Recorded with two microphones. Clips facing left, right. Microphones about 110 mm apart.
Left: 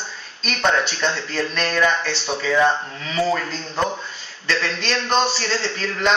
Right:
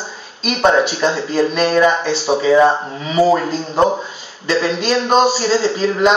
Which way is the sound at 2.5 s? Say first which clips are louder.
Right 6 dB; 30° right (ahead or behind).